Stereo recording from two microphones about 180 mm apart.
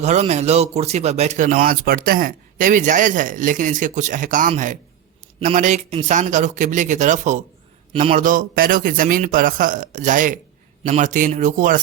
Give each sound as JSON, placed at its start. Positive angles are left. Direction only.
{"t": 0.0, "sound": "speech", "side_deg": -40}